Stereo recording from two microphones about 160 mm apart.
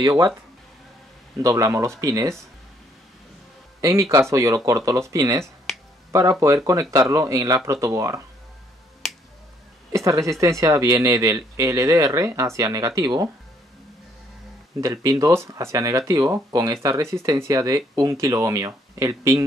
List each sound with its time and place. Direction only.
1.4 s speech: 20° right (ahead or behind)
3.8 s speech: 20° right (ahead or behind)
6.4 s speech: 20° right (ahead or behind)
9.9 s speech: 20° right (ahead or behind)
14.8 s speech: 20° right (ahead or behind)